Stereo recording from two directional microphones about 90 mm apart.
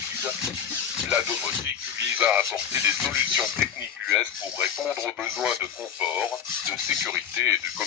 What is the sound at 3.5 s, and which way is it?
Speech, centre (ahead or behind).